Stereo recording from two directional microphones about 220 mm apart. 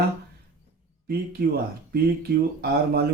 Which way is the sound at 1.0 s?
45° right (ahead or behind).